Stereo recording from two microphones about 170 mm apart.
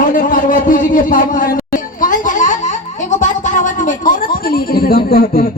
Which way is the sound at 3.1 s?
50° left (ahead or behind).